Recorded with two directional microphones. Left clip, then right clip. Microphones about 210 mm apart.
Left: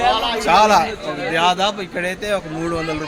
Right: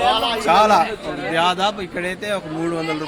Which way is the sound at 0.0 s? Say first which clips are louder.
Even; 30° right (ahead or behind).